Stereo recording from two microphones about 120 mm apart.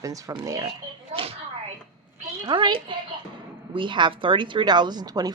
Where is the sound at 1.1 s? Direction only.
55° right (ahead or behind).